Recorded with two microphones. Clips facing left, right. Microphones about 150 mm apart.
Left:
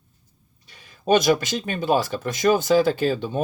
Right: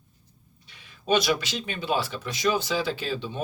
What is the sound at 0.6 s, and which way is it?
Speech, 45° left (ahead or behind).